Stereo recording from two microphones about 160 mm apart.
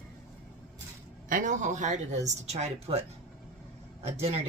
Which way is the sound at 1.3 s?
55° right (ahead or behind).